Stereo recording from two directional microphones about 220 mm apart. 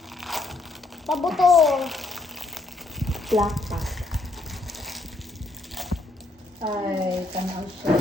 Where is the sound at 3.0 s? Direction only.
Centre (ahead or behind).